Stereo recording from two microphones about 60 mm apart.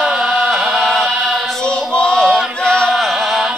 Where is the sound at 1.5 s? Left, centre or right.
Centre.